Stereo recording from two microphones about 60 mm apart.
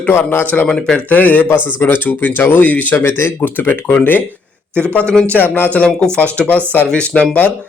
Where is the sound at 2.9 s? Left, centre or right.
Left.